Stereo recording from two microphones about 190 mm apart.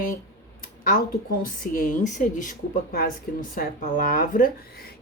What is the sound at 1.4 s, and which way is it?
Speech, 45° left (ahead or behind).